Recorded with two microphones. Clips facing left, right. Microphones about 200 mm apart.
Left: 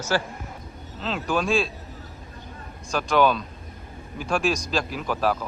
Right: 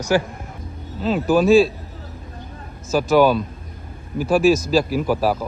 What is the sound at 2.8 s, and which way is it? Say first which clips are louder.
Speech: right 6 dB; 5° right (ahead or behind).